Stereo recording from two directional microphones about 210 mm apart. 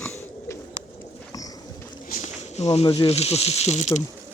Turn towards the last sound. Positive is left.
turn(degrees=35)  # may be behind; listen again after turning